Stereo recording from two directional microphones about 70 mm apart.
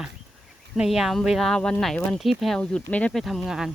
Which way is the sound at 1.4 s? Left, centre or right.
Centre.